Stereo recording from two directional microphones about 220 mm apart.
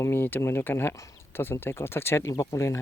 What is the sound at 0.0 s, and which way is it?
Speech, 10° left (ahead or behind).